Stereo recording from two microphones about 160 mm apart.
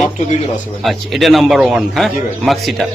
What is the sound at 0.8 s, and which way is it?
Speech, centre (ahead or behind).